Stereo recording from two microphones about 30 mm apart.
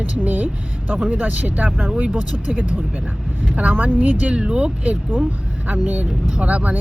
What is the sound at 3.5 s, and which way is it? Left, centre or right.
Speech, right.